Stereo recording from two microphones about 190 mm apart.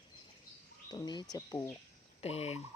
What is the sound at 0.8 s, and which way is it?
Speech, 20° left (ahead or behind).